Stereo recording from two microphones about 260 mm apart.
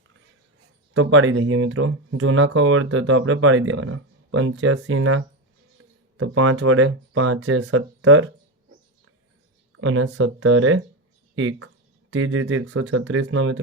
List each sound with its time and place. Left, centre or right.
0.9 s speech: right
9.7 s speech: right